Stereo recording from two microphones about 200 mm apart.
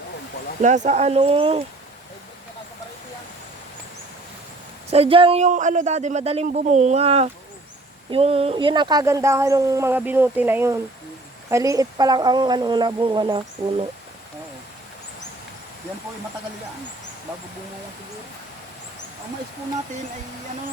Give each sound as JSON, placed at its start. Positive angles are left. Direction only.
{"t": 0.6, "sound": "speech", "side_deg": -35}
{"t": 4.9, "sound": "speech", "side_deg": -30}